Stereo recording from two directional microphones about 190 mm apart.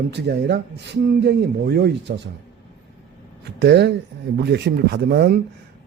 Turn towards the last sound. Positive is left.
turn(degrees=-60)  # may be behind; listen again after turning